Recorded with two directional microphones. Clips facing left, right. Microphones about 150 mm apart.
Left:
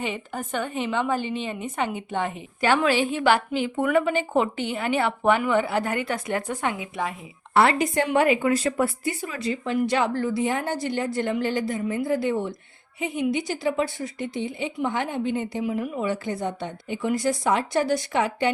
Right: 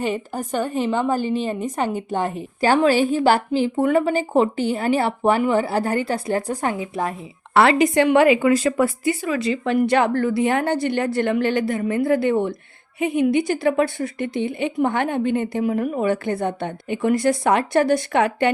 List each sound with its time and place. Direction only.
0.0 s a woman's voice: 40° right (ahead or behind)
7.5 s speech: 90° right
9.7 s a woman's voice: 55° right (ahead or behind)